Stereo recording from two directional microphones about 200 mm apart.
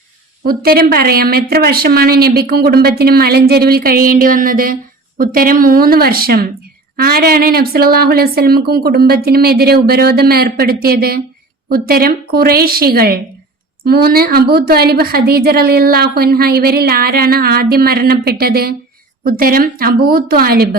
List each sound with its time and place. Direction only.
0.4 s speech: 50° right (ahead or behind)